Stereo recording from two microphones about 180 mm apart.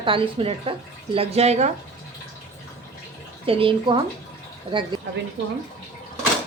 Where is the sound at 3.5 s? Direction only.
30° right (ahead or behind).